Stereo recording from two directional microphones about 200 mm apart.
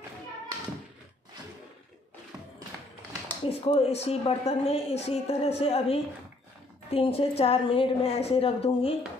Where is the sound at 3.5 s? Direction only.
30° left (ahead or behind).